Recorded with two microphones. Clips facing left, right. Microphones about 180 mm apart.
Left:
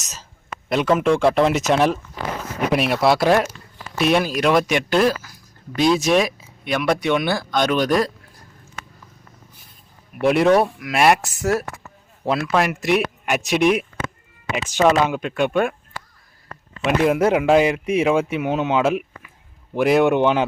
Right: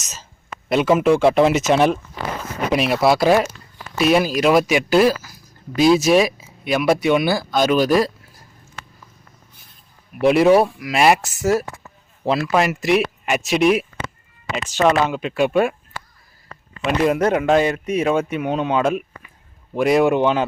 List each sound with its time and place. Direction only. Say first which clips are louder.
0.0 s a sound: right 1 dB; centre (ahead or behind)
0.7 s speech: right 2 dB; 5° right (ahead or behind)
10.2 s speech: right 2 dB; centre (ahead or behind)
14.5 s speech: even; 10° left (ahead or behind); by 15.7 s 5° right (ahead or behind)
16.5 s a sound: left 2 dB; 60° left (ahead or behind)
16.8 s speech: even; 5° left (ahead or behind)
20.2 s speech: even; 15° left (ahead or behind)